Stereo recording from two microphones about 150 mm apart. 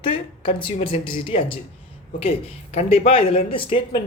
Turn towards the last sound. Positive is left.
turn(degrees=35)  # may be behind; listen again after turning